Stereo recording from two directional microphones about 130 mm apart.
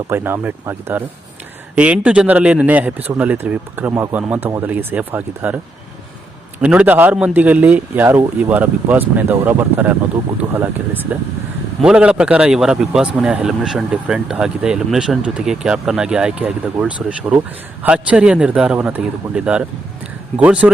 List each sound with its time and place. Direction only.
0.1 s a man's voice: 15° right (ahead or behind)
6.6 s a man's voice: 10° right (ahead or behind)